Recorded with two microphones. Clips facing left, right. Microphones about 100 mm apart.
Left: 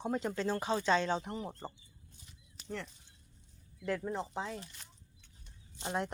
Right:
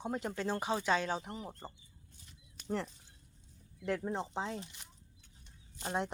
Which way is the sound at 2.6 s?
35° right (ahead or behind).